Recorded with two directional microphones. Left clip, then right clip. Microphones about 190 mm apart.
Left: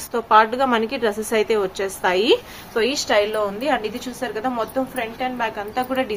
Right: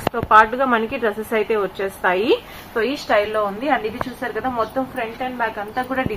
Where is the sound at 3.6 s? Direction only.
40° left (ahead or behind).